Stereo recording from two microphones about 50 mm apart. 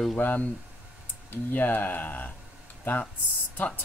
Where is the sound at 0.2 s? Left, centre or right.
Left.